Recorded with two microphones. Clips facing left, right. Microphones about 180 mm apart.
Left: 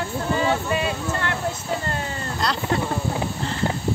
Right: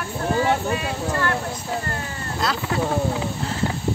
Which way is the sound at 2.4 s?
5° right (ahead or behind).